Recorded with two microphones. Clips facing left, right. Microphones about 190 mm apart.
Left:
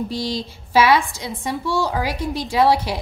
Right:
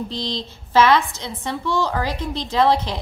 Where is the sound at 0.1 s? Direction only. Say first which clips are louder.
Left 3 dB; 10° left (ahead or behind).